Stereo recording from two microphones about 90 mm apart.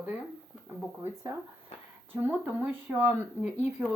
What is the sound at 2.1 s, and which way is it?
A woman's voice, 20° right (ahead or behind).